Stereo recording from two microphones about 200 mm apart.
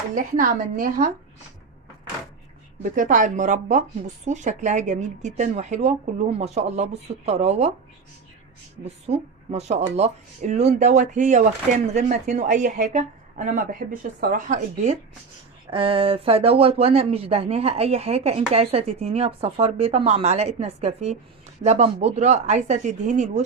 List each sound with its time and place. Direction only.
0.1 s speech: 40° right (ahead or behind)
2.8 s speech: 40° right (ahead or behind)
8.8 s speech: 30° right (ahead or behind)
15.7 s speech: 25° right (ahead or behind)